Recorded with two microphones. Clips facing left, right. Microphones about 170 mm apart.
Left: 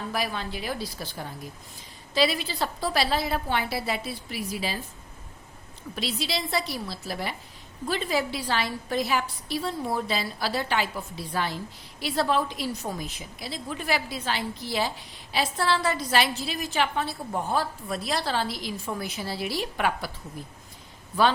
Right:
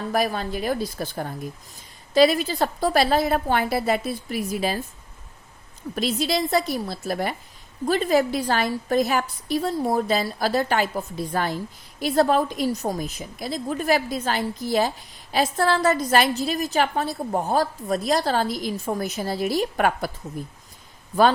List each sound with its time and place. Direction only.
0.1 s a woman's voice: 45° right (ahead or behind)
5.9 s a woman's voice: 45° right (ahead or behind)